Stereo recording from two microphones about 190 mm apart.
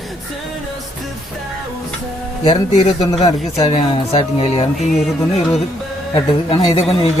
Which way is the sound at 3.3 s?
20° left (ahead or behind).